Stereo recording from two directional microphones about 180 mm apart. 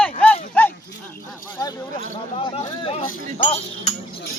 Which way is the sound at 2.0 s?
30° left (ahead or behind).